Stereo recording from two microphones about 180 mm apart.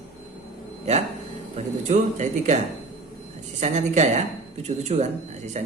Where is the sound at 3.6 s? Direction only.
40° right (ahead or behind).